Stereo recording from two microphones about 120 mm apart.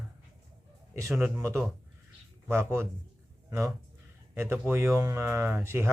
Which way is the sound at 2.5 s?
20° right (ahead or behind).